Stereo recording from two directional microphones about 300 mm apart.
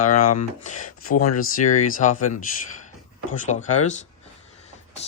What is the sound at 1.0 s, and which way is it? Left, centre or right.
Speech, left.